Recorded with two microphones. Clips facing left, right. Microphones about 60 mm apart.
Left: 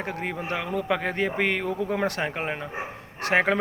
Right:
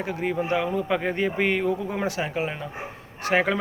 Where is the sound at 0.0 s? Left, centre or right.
Left.